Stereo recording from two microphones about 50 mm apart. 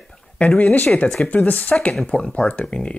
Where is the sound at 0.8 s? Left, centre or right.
Centre.